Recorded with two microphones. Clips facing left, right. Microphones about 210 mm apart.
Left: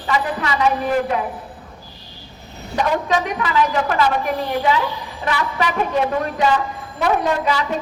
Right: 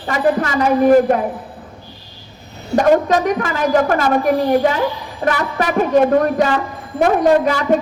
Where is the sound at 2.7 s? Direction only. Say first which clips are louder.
Right 7 dB; 45° right (ahead or behind).